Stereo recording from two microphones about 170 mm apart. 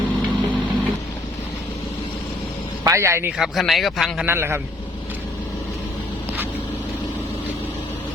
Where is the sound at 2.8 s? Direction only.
15° right (ahead or behind).